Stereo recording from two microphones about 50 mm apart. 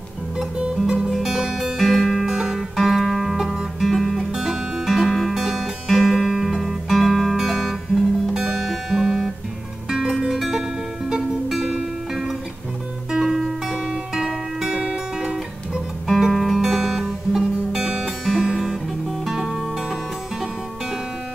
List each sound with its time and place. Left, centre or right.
0.7 s music: centre
4.3 s music: centre
4.8 s music: centre
15.3 s guitar: centre
16.6 s music: centre